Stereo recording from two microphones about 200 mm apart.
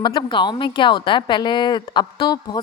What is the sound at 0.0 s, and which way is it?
A woman's voice, 20° left (ahead or behind).